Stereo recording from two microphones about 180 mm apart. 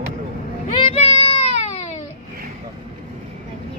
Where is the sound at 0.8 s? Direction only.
35° left (ahead or behind).